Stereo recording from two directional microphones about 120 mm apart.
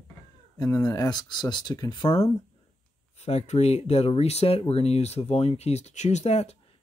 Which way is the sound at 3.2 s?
60° left (ahead or behind).